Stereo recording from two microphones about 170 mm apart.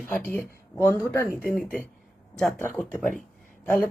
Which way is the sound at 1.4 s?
55° left (ahead or behind).